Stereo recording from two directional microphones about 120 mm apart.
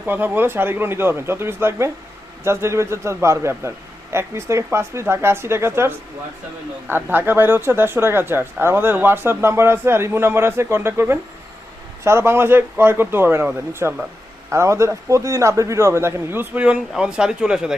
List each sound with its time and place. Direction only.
0.0 s speech: 15° right (ahead or behind)